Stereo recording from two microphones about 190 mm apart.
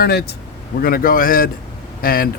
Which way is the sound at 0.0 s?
55° left (ahead or behind).